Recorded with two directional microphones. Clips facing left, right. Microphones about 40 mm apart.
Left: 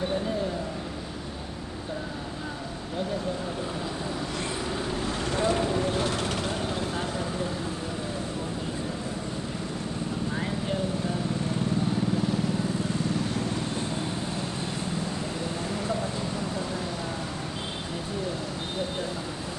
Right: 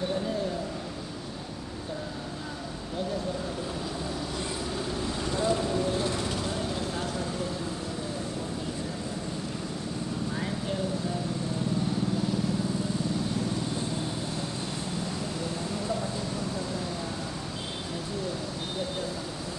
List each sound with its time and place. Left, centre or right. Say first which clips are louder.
5.2 s vehicle: left 2 dB; left